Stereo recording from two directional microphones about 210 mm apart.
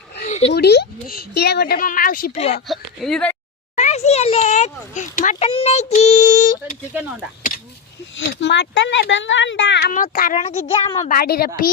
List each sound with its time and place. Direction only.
0.3 s a sound: 30° left (ahead or behind)
0.5 s a woman's voice: 50° left (ahead or behind)
2.6 s speech: centre (ahead or behind)
3.8 s speech: 30° left (ahead or behind)
8.1 s speech: 60° left (ahead or behind)
9.9 s speech: 40° left (ahead or behind)
10.4 s a child's voice: 25° left (ahead or behind)
11.1 s a woman's voice: 45° left (ahead or behind)